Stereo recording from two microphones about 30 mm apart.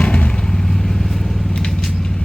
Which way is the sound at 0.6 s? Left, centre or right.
Centre.